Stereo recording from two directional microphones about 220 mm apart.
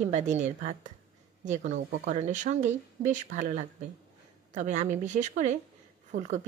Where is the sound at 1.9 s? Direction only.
35° right (ahead or behind).